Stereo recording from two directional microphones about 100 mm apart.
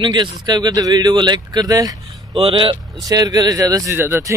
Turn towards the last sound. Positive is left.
turn(degrees=-25)  # may be behind; listen again after turning